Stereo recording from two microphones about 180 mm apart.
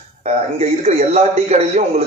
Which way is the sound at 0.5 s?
35° right (ahead or behind).